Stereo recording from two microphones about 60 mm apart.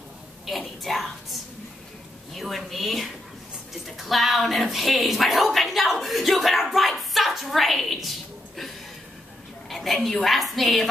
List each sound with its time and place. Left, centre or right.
0.6 s music: centre
2.3 s speech: centre
9.7 s speech: centre